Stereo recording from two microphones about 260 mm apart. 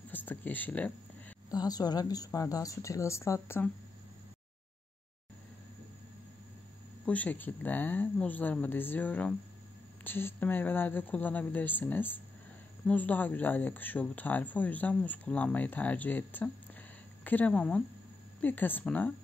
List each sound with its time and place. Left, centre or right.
0.1 s a woman's voice: centre
7.1 s speech: centre